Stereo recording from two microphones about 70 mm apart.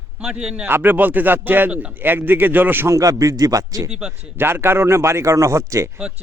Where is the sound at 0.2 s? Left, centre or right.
Centre.